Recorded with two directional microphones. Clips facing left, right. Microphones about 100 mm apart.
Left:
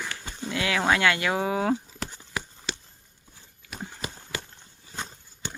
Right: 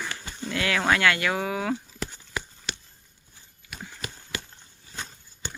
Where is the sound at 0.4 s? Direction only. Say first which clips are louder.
Even; 15° left (ahead or behind).